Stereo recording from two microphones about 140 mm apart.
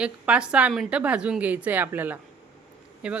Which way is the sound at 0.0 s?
5° right (ahead or behind).